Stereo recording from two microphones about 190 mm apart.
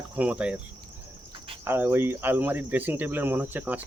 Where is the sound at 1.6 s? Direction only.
10° right (ahead or behind).